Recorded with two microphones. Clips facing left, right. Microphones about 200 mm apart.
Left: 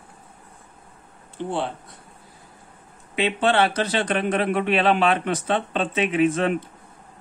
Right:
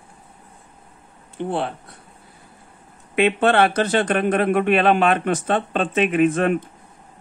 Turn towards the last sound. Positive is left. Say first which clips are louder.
# right 3 dB
turn(degrees=-50)  # may be behind; listen again after turning